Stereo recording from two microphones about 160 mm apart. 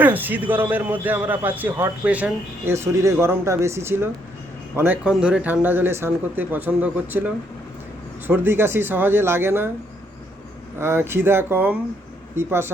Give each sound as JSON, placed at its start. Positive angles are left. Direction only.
{"t": 0.0, "sound": "a man's voice", "side_deg": -10}
{"t": 10.8, "sound": "a man's voice", "side_deg": -15}